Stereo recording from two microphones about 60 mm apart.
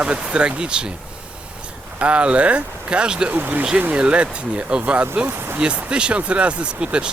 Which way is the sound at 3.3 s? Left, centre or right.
Right.